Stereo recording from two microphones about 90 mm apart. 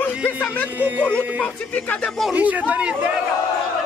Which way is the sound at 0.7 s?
20° right (ahead or behind).